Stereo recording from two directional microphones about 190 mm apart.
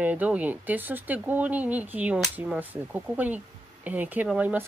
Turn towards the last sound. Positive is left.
turn(degrees=-5)  # may be behind; listen again after turning